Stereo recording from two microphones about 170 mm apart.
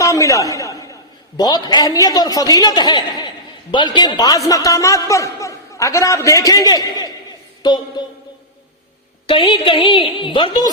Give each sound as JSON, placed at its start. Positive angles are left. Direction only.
{"t": 0.0, "sound": "a sound", "side_deg": 20}
{"t": 1.4, "sound": "a man's voice", "side_deg": 25}
{"t": 9.2, "sound": "a man's voice", "side_deg": 30}